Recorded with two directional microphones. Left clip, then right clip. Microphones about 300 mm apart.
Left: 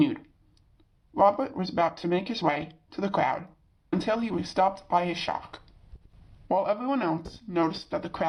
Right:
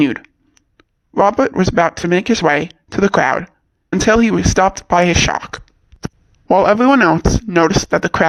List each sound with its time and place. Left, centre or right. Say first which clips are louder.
0.0 s speech: right 10 dB; right